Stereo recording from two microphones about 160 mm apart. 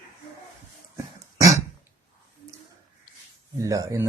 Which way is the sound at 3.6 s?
20° right (ahead or behind).